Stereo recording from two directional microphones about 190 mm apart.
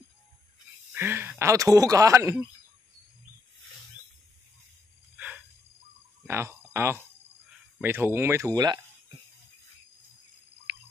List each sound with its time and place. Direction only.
0.9 s speech: 10° right (ahead or behind)
5.1 s a sound: 5° right (ahead or behind)
6.2 s speech: 15° right (ahead or behind)